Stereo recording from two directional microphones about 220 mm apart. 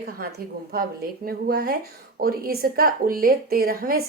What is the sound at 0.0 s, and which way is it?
A woman's voice, 45° right (ahead or behind).